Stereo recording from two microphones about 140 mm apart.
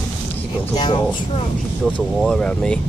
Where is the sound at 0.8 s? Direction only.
35° left (ahead or behind).